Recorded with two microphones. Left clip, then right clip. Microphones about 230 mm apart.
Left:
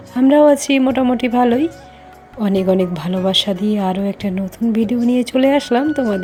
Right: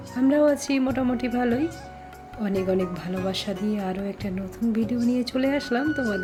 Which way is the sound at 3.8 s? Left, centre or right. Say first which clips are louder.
Left 10 dB; left.